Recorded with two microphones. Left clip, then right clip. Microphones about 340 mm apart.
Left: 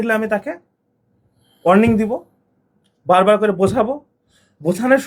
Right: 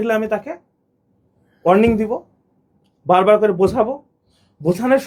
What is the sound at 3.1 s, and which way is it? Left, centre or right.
Speech, centre.